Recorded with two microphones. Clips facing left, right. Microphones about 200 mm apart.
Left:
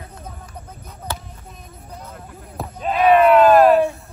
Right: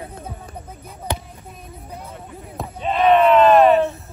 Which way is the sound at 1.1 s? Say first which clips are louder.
Right 4 dB; 15° right (ahead or behind).